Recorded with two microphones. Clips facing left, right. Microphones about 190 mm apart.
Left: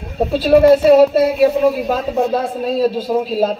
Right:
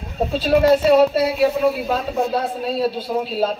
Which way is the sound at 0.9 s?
45° left (ahead or behind).